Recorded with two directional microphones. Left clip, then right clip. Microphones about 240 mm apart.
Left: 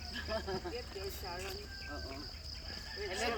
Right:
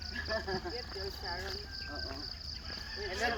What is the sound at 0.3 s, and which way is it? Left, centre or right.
Cricket, centre.